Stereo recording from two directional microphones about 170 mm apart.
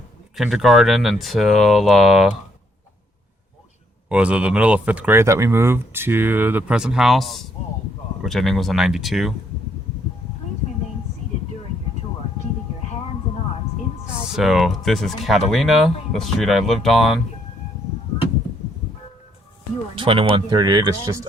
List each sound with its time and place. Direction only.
0.3 s speech: centre (ahead or behind)
4.1 s speech: 5° right (ahead or behind)
14.3 s speech: centre (ahead or behind)
20.0 s speech: 30° right (ahead or behind)